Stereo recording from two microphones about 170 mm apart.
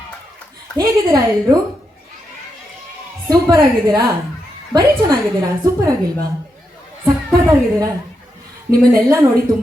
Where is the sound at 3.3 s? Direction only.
25° right (ahead or behind).